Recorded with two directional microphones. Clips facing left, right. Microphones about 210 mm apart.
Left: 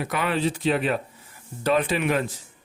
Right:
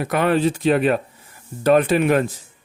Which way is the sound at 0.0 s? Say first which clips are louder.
Right 7 dB; 50° right (ahead or behind).